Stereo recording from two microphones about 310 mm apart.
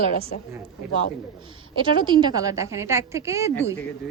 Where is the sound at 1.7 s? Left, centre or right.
Centre.